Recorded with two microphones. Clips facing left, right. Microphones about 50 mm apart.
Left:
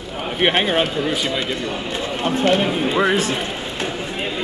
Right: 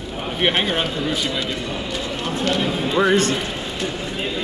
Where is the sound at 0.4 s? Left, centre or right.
Centre.